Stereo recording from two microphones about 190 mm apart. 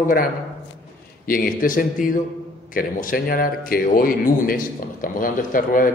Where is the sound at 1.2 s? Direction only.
45° left (ahead or behind).